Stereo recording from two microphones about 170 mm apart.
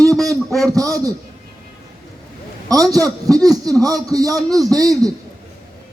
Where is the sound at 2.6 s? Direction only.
20° right (ahead or behind).